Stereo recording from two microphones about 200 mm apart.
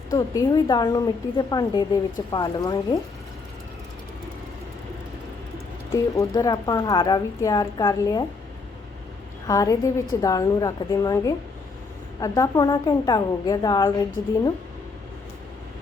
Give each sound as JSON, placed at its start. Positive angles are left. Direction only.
{"t": 0.1, "sound": "a woman's voice", "side_deg": 20}
{"t": 6.1, "sound": "a woman's voice", "side_deg": 20}
{"t": 9.5, "sound": "a woman's voice", "side_deg": 15}